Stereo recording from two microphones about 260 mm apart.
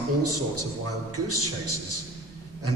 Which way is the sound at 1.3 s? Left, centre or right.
Right.